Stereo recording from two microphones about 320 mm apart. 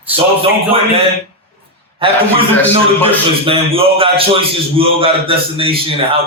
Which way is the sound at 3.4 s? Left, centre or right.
Centre.